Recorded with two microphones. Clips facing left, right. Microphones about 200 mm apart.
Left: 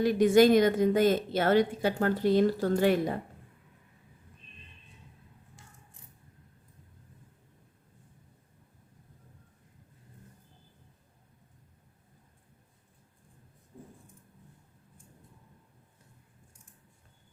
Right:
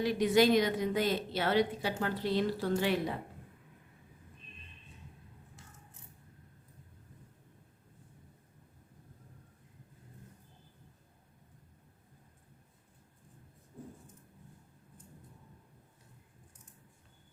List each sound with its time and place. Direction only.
0.0 s a woman's voice: 50° left (ahead or behind)